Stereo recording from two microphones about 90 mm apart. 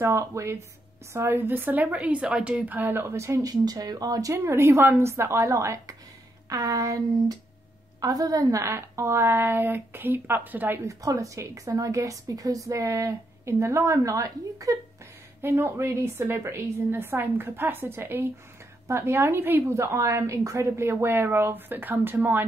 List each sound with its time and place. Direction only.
0.0 s a woman's voice: 35° right (ahead or behind)
4.4 s a woman's voice: 30° right (ahead or behind)
10.9 s a woman's voice: 40° right (ahead or behind)
15.4 s a woman's voice: 25° right (ahead or behind)